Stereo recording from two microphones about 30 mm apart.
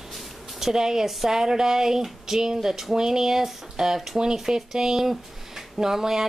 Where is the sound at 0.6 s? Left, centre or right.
Centre.